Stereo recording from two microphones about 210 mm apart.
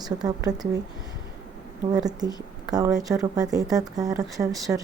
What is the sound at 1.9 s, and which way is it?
A woman's voice, 20° right (ahead or behind).